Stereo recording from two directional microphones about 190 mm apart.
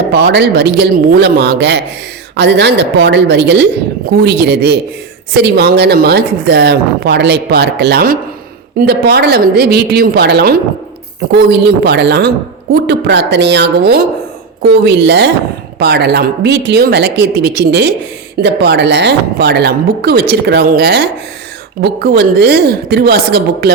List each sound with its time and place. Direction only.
0.1 s a woman's voice: 60° right (ahead or behind)